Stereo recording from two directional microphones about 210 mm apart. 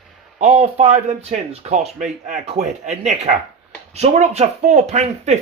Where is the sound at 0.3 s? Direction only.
35° right (ahead or behind).